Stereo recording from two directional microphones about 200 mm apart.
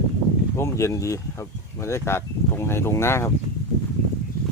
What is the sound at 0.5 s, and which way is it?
Speech, 15° left (ahead or behind).